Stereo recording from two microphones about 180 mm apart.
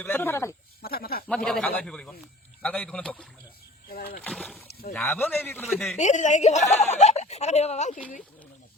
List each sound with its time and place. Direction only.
0.0 s a man's voice: 10° left (ahead or behind)
0.8 s snake: 55° left (ahead or behind)
1.5 s a man's voice: 5° left (ahead or behind)
3.8 s a sound: 55° left (ahead or behind)
4.2 s rowboat: 5° left (ahead or behind)
4.9 s a man's voice: 10° left (ahead or behind)
5.6 s a man's voice: centre (ahead or behind)
6.0 s speech: 40° left (ahead or behind)